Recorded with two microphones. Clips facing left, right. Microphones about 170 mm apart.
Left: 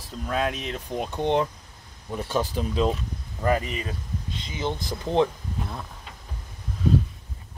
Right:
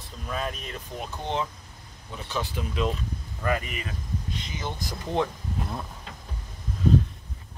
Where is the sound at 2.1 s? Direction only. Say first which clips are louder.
Left 6 dB; 45° left (ahead or behind); by 5.3 s 20° left (ahead or behind).